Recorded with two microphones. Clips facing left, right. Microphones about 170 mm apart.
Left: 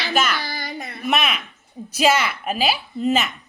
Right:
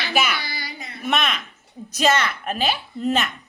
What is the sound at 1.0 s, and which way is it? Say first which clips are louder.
A woman's voice: left 1 dB; 5° left (ahead or behind).